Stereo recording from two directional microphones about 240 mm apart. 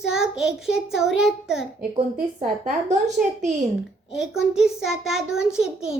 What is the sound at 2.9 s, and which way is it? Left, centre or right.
Speech, right.